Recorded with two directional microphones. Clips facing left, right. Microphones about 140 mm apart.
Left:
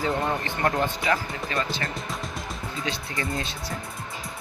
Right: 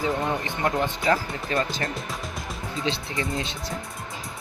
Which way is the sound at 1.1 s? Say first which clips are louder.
Right 2 dB; 35° right (ahead or behind).